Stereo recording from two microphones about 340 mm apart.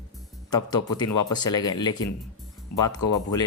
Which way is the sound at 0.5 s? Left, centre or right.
Centre.